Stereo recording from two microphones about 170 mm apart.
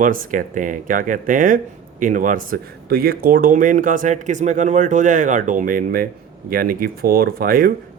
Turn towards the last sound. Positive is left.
turn(degrees=-60)  # may be behind; listen again after turning